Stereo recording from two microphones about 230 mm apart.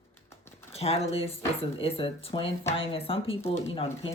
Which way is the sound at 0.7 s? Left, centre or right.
Left.